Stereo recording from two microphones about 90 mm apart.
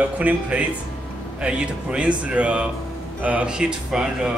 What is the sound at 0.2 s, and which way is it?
A man's voice, 15° right (ahead or behind).